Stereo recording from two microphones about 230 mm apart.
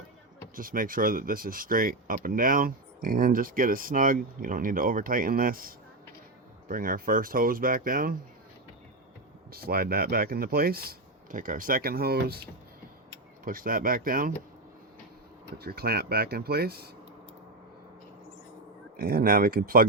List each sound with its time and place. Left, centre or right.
0.5 s speech: right
9.5 s speech: right
15.5 s speech: right
18.9 s speech: right